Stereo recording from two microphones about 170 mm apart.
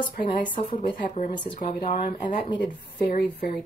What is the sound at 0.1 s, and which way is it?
Speech, 50° left (ahead or behind).